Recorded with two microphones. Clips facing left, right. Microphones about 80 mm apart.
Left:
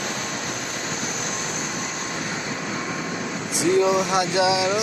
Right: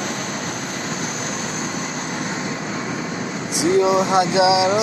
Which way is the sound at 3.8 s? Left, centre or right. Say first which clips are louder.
Right 4 dB; right.